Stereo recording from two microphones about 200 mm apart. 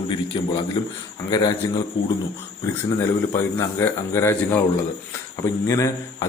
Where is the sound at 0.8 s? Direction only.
25° left (ahead or behind).